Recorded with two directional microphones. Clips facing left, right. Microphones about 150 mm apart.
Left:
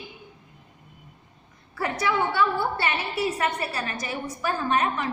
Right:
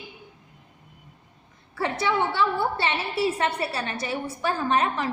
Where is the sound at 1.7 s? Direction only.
25° right (ahead or behind).